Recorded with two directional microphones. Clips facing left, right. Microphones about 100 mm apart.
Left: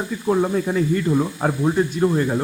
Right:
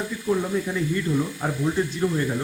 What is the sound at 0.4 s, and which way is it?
Speech, 40° left (ahead or behind).